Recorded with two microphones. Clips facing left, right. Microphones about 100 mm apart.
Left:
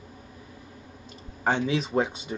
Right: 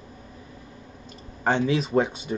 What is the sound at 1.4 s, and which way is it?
Speech, 15° left (ahead or behind).